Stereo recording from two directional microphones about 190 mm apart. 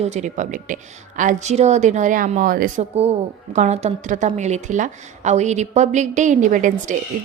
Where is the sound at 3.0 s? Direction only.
35° right (ahead or behind).